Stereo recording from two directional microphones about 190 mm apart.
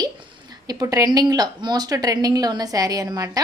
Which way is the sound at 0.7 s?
20° right (ahead or behind).